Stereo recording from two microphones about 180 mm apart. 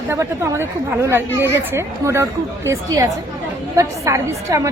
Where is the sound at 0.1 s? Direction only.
15° right (ahead or behind).